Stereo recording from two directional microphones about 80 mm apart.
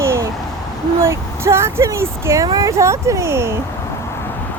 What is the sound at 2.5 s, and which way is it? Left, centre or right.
Speech, right.